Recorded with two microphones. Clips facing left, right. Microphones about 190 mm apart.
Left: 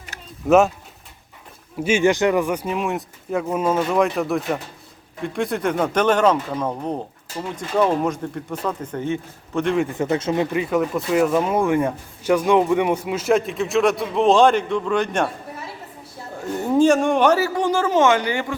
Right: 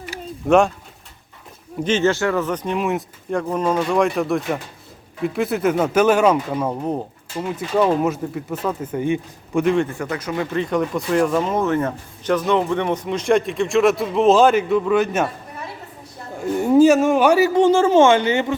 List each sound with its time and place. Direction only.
0.1 s a sound: 15° right (ahead or behind)
0.4 s speech: 5° left (ahead or behind)
1.8 s speech: 10° left (ahead or behind); by 9.6 s 10° right (ahead or behind)
9.9 s speech: 25° left (ahead or behind); by 15.3 s 5° right (ahead or behind)
16.6 s speech: 10° right (ahead or behind)